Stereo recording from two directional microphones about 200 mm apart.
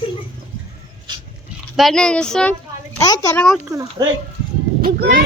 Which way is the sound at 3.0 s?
15° left (ahead or behind).